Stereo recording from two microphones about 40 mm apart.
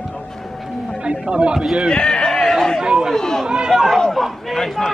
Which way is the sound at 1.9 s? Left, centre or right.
Centre.